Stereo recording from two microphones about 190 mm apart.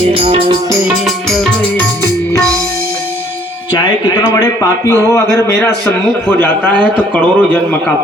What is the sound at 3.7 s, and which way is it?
A man's voice, 25° left (ahead or behind).